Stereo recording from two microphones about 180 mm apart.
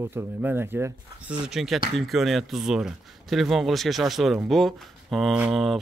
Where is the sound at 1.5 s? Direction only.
Centre (ahead or behind).